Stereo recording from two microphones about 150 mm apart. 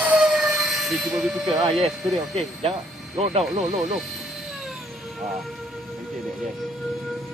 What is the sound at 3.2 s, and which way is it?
Speech, 45° right (ahead or behind).